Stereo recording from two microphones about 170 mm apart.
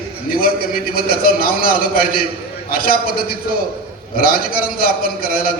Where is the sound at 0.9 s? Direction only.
60° left (ahead or behind).